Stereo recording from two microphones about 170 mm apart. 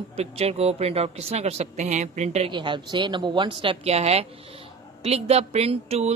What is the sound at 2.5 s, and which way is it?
A woman's voice, 30° right (ahead or behind).